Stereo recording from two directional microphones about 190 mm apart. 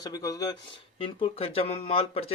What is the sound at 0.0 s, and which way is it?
Speech, 20° left (ahead or behind).